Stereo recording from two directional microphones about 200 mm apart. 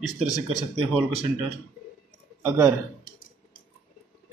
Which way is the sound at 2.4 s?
10° right (ahead or behind).